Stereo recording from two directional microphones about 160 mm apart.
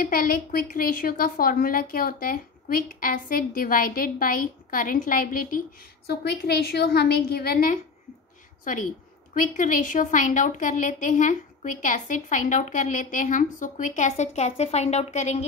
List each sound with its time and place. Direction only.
0.0 s a woman's voice: 65° left (ahead or behind)
6.0 s a woman's voice: 90° left
8.7 s a woman's voice: 55° left (ahead or behind)